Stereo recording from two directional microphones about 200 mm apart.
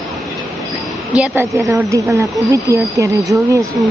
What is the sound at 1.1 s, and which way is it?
A woman's voice, 10° right (ahead or behind).